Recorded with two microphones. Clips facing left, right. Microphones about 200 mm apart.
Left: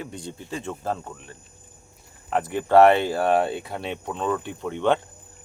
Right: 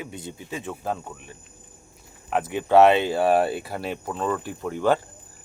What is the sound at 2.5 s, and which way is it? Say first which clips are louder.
Speech: left 1 dB; 15° right (ahead or behind).